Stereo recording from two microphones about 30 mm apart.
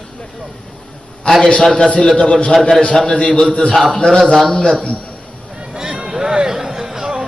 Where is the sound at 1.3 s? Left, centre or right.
Left.